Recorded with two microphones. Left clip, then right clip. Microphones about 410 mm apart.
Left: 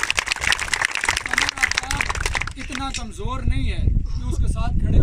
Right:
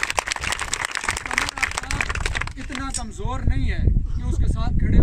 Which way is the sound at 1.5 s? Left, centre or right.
Right.